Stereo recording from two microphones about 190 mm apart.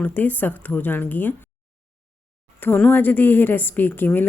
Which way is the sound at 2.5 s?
10° left (ahead or behind).